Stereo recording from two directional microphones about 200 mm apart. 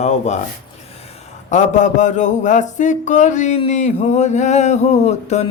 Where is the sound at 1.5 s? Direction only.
35° left (ahead or behind).